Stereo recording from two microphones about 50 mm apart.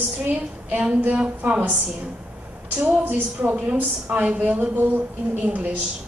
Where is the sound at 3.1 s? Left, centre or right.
Right.